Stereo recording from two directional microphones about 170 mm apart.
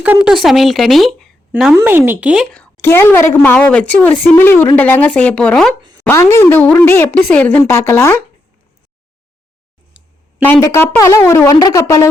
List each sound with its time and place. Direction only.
0.0 s speech: 5° right (ahead or behind)
2.7 s speech: 15° left (ahead or behind)
5.8 s a sound: 25° right (ahead or behind)
6.1 s speech: 15° left (ahead or behind)
10.4 s speech: 15° left (ahead or behind)